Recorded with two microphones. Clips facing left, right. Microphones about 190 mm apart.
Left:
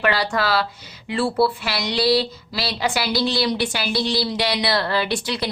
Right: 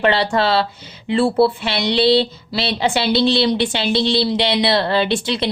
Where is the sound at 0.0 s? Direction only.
25° right (ahead or behind).